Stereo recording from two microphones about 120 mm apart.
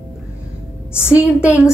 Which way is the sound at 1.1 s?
10° right (ahead or behind).